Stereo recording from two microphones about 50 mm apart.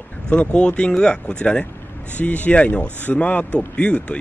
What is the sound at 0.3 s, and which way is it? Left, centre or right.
A man's voice, left.